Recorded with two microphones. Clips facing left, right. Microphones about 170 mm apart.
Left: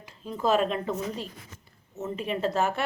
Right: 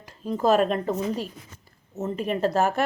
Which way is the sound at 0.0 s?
40° right (ahead or behind).